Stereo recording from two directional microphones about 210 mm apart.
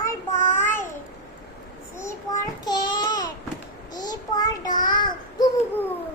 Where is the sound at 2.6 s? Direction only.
20° left (ahead or behind).